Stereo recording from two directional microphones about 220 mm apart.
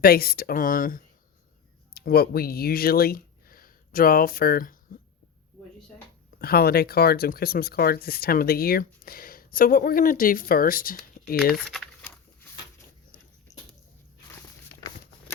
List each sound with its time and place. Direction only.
0.0 s speech: 45° left (ahead or behind)
6.4 s speech: 45° left (ahead or behind)
11.5 s a sound: centre (ahead or behind)